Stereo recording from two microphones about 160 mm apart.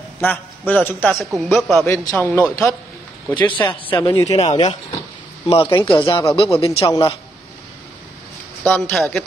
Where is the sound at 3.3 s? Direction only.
30° left (ahead or behind).